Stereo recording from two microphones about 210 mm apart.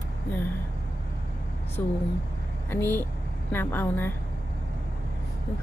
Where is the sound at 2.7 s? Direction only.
10° left (ahead or behind).